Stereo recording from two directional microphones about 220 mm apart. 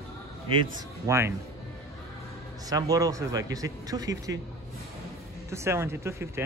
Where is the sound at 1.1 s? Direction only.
15° right (ahead or behind).